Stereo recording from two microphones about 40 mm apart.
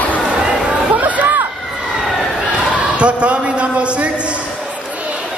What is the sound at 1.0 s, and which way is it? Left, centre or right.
Crowd, right.